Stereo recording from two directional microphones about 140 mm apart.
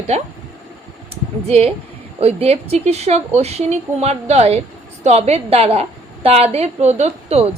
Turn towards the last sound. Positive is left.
turn(degrees=-50)  # may be behind; listen again after turning